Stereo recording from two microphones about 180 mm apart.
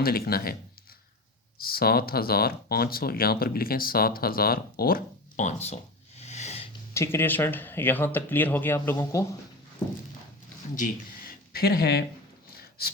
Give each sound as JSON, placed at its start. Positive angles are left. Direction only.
{"t": 0.0, "sound": "speech", "side_deg": 60}
{"t": 1.5, "sound": "speech", "side_deg": 55}
{"t": 6.9, "sound": "speech", "side_deg": 15}
{"t": 10.8, "sound": "speech", "side_deg": 55}